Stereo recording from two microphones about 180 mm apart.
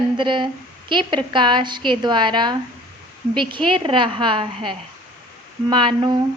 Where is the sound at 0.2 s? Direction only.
25° right (ahead or behind).